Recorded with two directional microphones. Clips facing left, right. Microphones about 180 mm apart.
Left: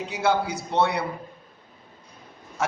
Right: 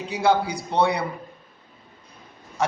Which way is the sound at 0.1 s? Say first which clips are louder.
Right 3 dB; 5° left (ahead or behind).